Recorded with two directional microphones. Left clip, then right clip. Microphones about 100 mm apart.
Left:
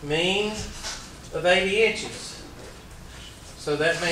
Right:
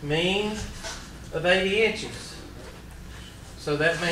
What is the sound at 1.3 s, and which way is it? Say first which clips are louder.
Speech: left 2 dB; centre (ahead or behind).